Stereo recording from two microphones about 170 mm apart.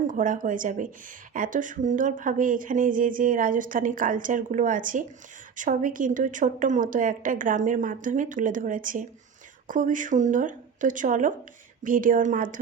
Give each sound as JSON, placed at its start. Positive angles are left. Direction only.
{"t": 0.1, "sound": "speech", "side_deg": -50}